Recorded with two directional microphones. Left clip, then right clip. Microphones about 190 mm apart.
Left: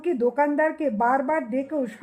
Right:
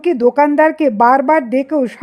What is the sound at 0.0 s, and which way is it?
A woman's voice, 35° right (ahead or behind).